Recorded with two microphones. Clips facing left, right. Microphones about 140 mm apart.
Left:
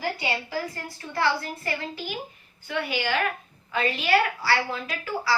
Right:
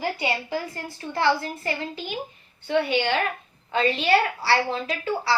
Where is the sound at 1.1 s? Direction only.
20° right (ahead or behind).